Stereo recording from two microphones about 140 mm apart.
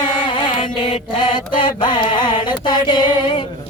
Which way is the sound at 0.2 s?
35° left (ahead or behind).